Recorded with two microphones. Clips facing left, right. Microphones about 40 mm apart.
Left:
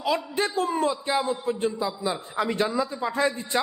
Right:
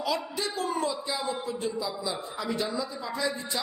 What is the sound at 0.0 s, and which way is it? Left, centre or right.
A man's voice, left.